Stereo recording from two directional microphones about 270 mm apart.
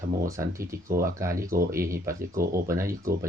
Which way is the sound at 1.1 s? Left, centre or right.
Centre.